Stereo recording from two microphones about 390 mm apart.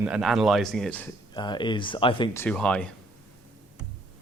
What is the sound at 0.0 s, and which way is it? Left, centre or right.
Speech, centre.